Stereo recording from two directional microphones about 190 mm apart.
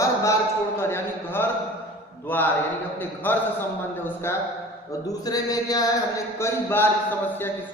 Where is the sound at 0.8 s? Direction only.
15° left (ahead or behind).